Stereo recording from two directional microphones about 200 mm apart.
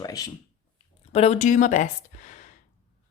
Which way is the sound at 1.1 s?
30° left (ahead or behind).